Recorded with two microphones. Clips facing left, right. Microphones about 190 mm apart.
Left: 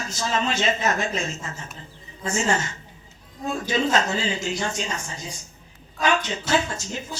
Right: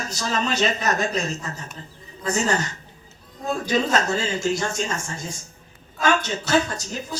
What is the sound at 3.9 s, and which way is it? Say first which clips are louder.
Speech: right 1 dB; 45° right (ahead or behind).